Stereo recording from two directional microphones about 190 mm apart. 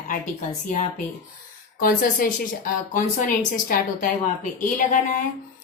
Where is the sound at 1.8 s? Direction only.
50° left (ahead or behind).